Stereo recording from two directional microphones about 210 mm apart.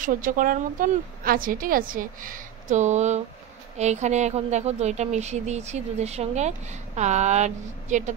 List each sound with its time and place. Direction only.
0.0 s speech: 40° right (ahead or behind)